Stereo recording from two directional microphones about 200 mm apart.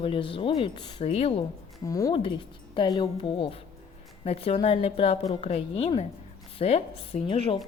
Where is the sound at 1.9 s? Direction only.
15° left (ahead or behind).